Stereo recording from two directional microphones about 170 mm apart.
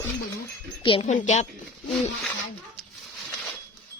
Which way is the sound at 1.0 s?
45° left (ahead or behind).